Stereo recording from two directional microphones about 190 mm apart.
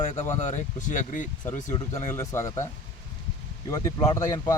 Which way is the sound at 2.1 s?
15° left (ahead or behind).